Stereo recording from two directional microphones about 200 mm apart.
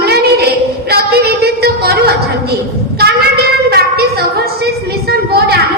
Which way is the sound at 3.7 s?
55° right (ahead or behind).